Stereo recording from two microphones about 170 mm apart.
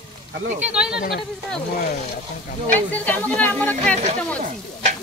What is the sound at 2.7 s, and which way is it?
Speech, 10° left (ahead or behind).